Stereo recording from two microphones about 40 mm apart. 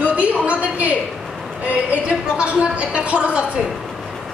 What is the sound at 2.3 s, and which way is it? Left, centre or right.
A woman's voice, right.